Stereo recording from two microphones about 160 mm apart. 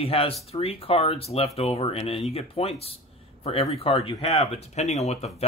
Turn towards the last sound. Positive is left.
turn(degrees=40)  # may be behind; listen again after turning